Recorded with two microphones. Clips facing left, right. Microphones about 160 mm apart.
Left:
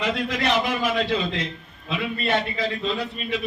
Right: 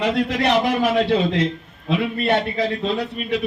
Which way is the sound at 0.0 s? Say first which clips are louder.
Right 5 dB; 65° right (ahead or behind).